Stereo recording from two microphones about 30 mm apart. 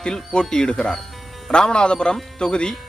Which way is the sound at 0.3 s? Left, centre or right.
Left.